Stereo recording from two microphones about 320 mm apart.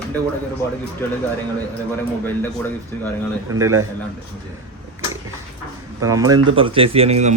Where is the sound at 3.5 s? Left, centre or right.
Centre.